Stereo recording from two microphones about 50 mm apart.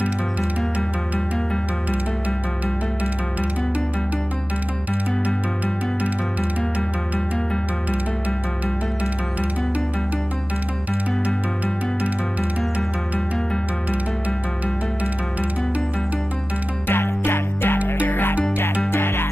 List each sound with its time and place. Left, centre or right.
16.8 s music: left